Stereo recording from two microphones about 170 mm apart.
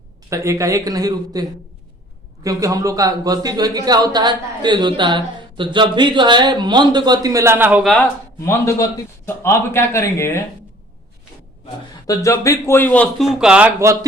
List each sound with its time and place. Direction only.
0.3 s a man's voice: 20° right (ahead or behind)
7.9 s speech: 5° left (ahead or behind)
8.4 s a man's voice: 15° left (ahead or behind)
12.0 s a man's voice: 20° left (ahead or behind); by 14.0 s 15° right (ahead or behind)